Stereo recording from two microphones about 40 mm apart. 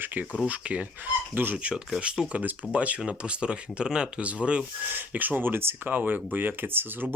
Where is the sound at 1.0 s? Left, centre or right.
Right; by 4.2 s centre.